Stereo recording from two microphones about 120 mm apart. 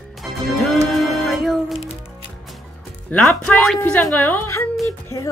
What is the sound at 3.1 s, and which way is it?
Speech, 10° left (ahead or behind).